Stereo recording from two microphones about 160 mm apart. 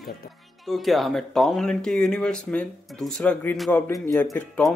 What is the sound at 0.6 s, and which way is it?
Speech, centre (ahead or behind).